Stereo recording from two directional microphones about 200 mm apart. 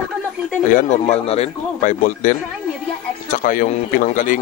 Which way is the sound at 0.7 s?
35° left (ahead or behind).